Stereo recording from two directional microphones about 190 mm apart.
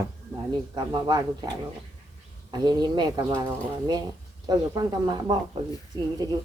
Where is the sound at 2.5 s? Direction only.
20° right (ahead or behind).